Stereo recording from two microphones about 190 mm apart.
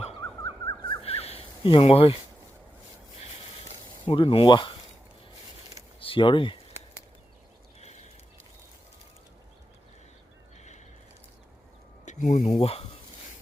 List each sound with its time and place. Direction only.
0.4 s bird: 20° left (ahead or behind)
1.0 s a sound: 30° left (ahead or behind)
4.0 s speech: 25° left (ahead or behind)
6.0 s speech: 30° left (ahead or behind)
12.0 s a sound: 40° left (ahead or behind)
12.5 s speech: 30° left (ahead or behind)